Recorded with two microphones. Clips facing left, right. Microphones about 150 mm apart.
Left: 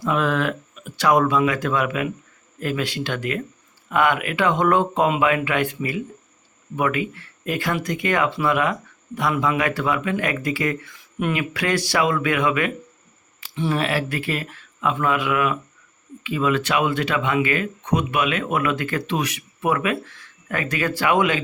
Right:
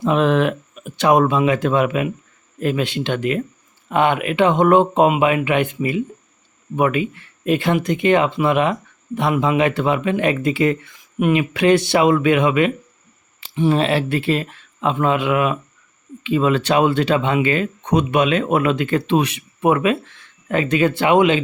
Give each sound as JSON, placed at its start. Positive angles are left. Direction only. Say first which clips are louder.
{"t": 0.0, "sound": "speech", "louder": "right 5 dB", "side_deg": -25}